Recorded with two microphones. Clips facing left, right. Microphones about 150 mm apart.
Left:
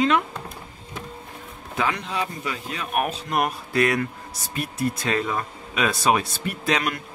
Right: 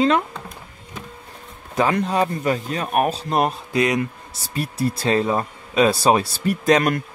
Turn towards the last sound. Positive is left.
turn(degrees=-45)  # may be behind; listen again after turning